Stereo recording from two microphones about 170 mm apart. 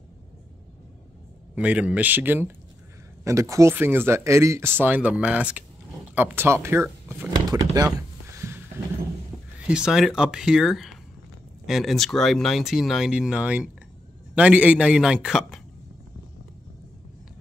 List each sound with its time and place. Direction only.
1.5 s speech: 10° right (ahead or behind)
8.4 s a sound: 15° right (ahead or behind)
9.7 s speech: 5° right (ahead or behind)